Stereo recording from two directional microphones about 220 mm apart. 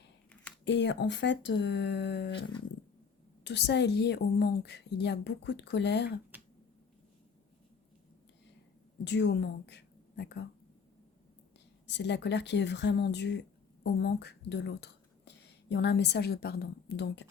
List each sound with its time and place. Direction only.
0.3 s a sound: 5° left (ahead or behind)
0.6 s a woman's voice: 50° left (ahead or behind)
3.4 s a woman's voice: 50° left (ahead or behind)
9.0 s speech: 50° left (ahead or behind)
11.9 s a woman's voice: 50° left (ahead or behind)